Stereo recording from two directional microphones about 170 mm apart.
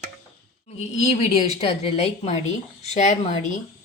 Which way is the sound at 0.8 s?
40° left (ahead or behind).